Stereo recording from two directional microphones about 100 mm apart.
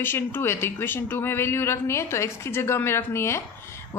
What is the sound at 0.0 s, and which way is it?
A man's voice, 20° left (ahead or behind).